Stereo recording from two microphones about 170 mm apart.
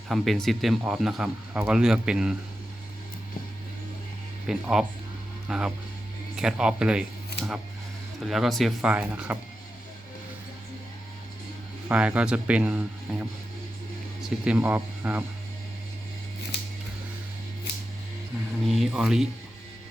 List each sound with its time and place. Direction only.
0.1 s speech: centre (ahead or behind)
4.4 s speech: 5° right (ahead or behind)
8.2 s speech: centre (ahead or behind)
11.9 s speech: 10° right (ahead or behind)
16.5 s scissors: 85° left
17.7 s a sound: 80° left
18.7 s speech: centre (ahead or behind)